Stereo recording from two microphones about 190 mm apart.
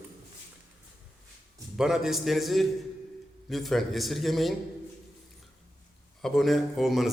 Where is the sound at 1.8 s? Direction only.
5° right (ahead or behind).